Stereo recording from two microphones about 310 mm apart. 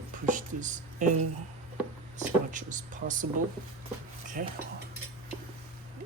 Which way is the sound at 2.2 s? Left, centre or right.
Right.